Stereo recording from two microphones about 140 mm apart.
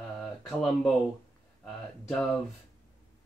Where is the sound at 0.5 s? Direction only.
Centre (ahead or behind).